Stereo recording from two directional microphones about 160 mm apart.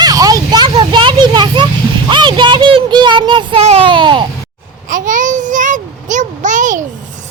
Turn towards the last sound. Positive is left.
turn(degrees=-50)  # may be behind; listen again after turning